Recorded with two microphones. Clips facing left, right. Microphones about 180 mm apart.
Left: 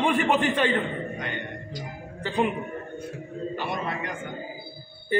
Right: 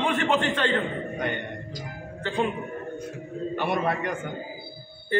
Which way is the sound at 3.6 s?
60° right (ahead or behind).